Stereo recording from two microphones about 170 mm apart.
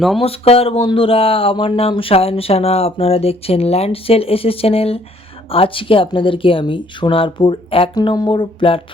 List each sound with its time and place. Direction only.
0.2 s speech: 35° left (ahead or behind)